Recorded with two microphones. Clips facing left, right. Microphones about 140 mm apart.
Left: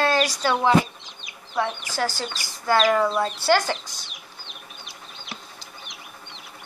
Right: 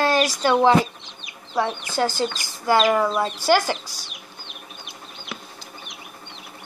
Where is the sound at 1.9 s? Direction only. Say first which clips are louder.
Right 5 dB; 20° right (ahead or behind).